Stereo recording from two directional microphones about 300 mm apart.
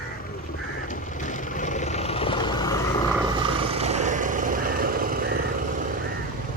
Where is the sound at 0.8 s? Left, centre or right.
Left.